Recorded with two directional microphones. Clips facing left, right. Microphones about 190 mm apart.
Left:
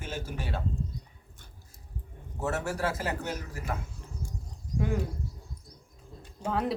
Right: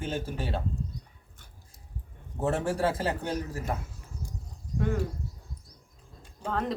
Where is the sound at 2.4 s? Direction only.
30° right (ahead or behind).